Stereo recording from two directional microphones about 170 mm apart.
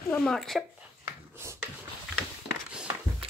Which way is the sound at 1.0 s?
15° right (ahead or behind).